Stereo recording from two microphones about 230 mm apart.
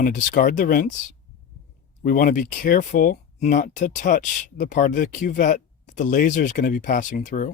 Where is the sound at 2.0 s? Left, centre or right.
Left.